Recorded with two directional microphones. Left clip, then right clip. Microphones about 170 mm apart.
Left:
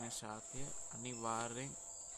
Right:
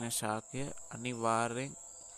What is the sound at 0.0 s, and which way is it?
Speech, 45° right (ahead or behind).